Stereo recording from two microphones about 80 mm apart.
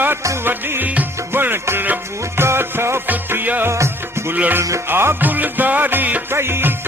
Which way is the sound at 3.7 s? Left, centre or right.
Right.